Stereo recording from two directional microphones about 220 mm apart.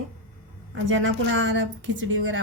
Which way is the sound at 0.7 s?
60° right (ahead or behind).